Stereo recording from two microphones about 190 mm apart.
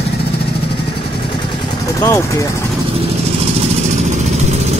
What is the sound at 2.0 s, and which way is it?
Speech, 15° left (ahead or behind).